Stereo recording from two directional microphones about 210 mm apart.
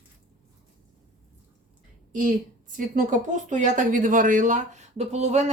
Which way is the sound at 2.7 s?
40° right (ahead or behind).